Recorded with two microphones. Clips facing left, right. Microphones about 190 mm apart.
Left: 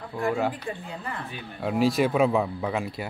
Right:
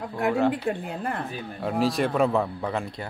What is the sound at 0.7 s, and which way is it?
Speech, 55° right (ahead or behind).